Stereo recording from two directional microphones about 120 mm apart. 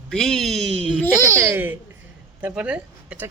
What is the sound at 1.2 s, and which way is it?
Babbling, 25° right (ahead or behind).